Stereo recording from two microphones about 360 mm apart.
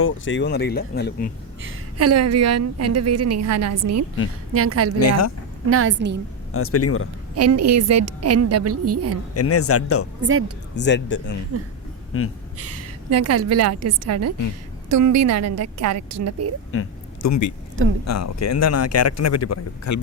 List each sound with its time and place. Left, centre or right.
0.0 s speech: left
1.6 s a woman's voice: right
4.9 s a man's voice: left
5.7 s a woman's voice: right
6.5 s a man's voice: left
7.3 s a woman's voice: right
9.3 s a man's voice: left
12.5 s a woman's voice: right
17.2 s a man's voice: left